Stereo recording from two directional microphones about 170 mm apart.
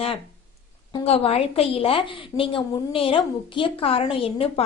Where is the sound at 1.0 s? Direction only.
35° left (ahead or behind).